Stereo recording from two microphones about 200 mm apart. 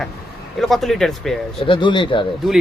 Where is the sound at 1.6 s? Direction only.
25° left (ahead or behind).